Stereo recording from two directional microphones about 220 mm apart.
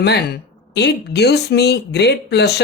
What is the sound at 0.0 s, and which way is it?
Speech, 50° left (ahead or behind).